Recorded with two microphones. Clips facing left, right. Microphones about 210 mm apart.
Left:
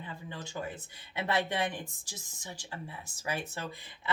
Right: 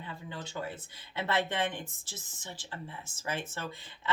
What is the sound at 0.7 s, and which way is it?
Speech, 15° left (ahead or behind).